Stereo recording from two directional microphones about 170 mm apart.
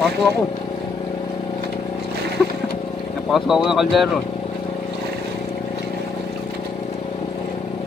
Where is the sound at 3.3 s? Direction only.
Centre (ahead or behind).